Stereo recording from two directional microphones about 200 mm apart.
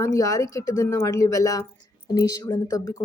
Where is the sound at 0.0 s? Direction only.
15° left (ahead or behind).